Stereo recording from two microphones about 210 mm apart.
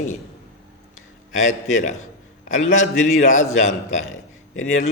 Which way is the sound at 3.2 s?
35° left (ahead or behind).